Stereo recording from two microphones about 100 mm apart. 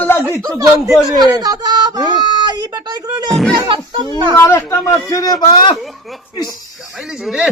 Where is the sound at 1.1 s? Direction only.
35° right (ahead or behind).